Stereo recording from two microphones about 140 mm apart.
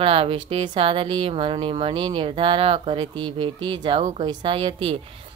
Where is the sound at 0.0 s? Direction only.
40° right (ahead or behind).